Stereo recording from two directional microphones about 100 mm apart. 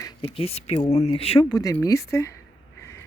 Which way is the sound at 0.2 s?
80° left.